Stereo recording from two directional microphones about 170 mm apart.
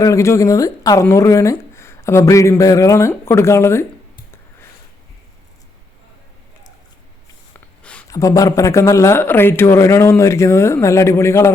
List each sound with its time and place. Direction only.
0.0 s a woman's voice: 15° left (ahead or behind)
8.1 s a woman's voice: 20° left (ahead or behind)